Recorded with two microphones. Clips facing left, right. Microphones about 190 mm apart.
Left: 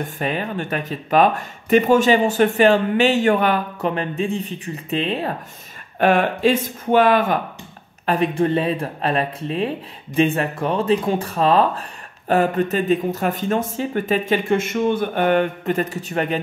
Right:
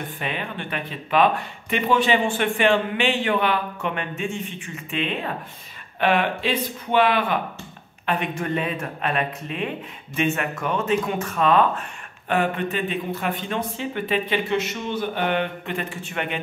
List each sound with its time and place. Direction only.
0.2 s speech: 40° left (ahead or behind)
8.1 s speech: 35° left (ahead or behind)